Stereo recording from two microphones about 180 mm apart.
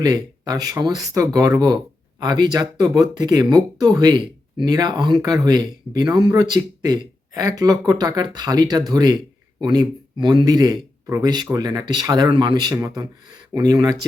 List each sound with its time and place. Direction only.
0.0 s speech: 20° right (ahead or behind)